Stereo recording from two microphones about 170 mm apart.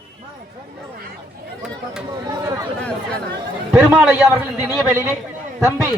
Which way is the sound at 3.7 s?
10° right (ahead or behind).